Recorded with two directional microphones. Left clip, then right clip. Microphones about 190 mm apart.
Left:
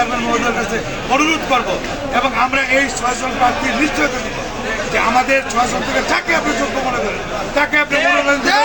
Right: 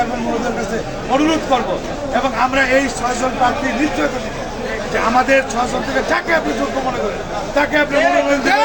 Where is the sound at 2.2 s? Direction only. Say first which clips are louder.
Right 1 dB; centre (ahead or behind).